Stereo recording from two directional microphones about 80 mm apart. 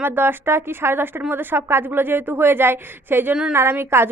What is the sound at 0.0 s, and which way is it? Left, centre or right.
A woman's voice, right.